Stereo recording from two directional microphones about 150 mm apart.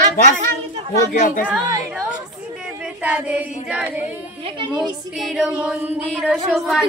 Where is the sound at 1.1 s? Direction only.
60° left (ahead or behind).